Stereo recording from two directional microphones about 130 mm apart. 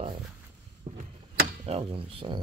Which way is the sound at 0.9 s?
80° right.